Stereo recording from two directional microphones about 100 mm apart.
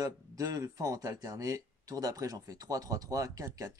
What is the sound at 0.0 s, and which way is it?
Speech, 35° right (ahead or behind).